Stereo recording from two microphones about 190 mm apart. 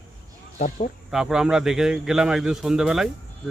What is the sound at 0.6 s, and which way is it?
Speech, 40° left (ahead or behind).